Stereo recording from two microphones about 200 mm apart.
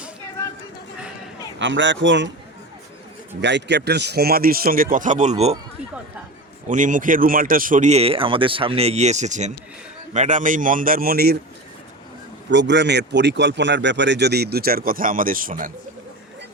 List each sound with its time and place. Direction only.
1.5 s speech: 65° right (ahead or behind)
3.4 s speech: 60° right (ahead or behind); by 5.5 s 35° right (ahead or behind)
6.7 s speech: 40° right (ahead or behind)
12.5 s speech: 60° right (ahead or behind); by 15.7 s 45° right (ahead or behind)